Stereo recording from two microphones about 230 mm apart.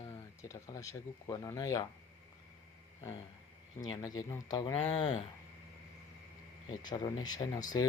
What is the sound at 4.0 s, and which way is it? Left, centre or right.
Speech, centre.